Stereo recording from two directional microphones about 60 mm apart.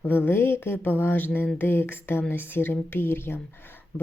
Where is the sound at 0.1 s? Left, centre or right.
Left.